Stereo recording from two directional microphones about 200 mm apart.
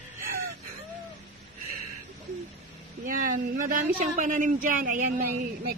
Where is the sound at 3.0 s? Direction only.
45° right (ahead or behind).